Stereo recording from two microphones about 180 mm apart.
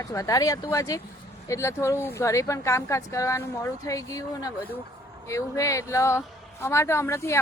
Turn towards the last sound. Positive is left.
turn(degrees=15)  # may be behind; listen again after turning